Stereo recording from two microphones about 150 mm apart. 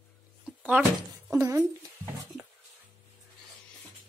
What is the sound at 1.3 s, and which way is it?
Speech, 20° right (ahead or behind).